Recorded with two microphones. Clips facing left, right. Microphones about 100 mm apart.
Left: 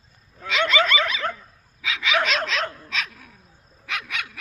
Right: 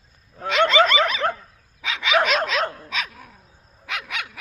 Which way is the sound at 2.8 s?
10° right (ahead or behind).